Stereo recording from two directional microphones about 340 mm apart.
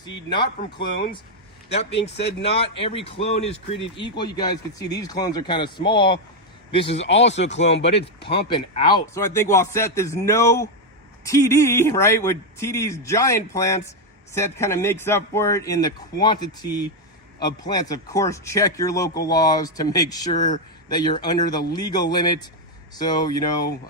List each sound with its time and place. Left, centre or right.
1.7 s speech: centre